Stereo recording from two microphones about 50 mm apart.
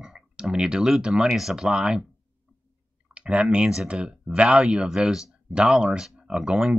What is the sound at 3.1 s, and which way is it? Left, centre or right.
Speech, right.